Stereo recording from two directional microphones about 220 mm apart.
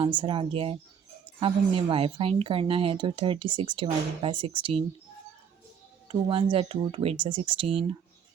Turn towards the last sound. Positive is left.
turn(degrees=-25)  # may be behind; listen again after turning